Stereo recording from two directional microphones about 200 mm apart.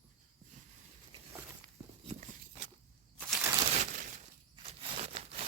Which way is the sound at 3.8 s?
40° right (ahead or behind).